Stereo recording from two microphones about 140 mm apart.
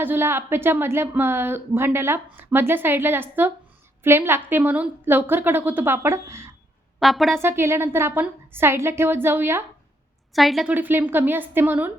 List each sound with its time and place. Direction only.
0.0 s a woman's voice: 15° right (ahead or behind)
7.0 s a woman's voice: centre (ahead or behind)
7.3 s a woman's voice: 15° right (ahead or behind)
10.3 s a woman's voice: centre (ahead or behind)
10.7 s a woman's voice: 15° right (ahead or behind)